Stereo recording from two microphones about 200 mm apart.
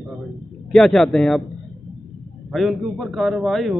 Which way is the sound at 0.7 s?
Centre (ahead or behind).